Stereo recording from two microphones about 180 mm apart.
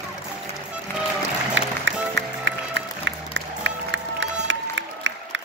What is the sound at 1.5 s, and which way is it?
Music, 90° right.